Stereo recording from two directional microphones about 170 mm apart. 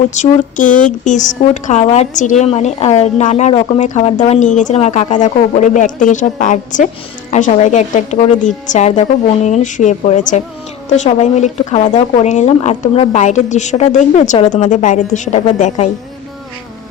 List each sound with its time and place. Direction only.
0.1 s a woman's voice: 45° left (ahead or behind)